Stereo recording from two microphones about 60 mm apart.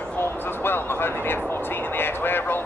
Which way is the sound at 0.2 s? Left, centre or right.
Left.